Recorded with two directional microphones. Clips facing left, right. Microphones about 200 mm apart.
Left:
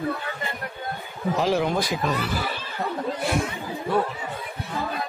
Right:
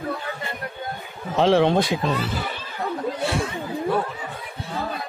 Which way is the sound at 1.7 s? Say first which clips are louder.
Right 4 dB; 25° right (ahead or behind).